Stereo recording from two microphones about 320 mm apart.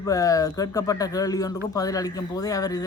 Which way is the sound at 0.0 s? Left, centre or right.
Centre.